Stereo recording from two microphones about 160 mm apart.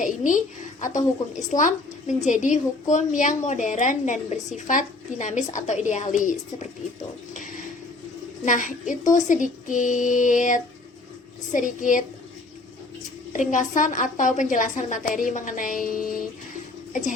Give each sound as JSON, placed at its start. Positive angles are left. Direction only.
{"t": 0.0, "sound": "a woman's voice", "side_deg": 55}
{"t": 7.3, "sound": "a sound", "side_deg": 55}
{"t": 8.4, "sound": "a woman's voice", "side_deg": 50}
{"t": 13.3, "sound": "a woman's voice", "side_deg": 50}